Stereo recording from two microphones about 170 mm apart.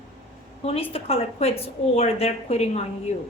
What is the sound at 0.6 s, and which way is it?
A woman's voice, 35° left (ahead or behind).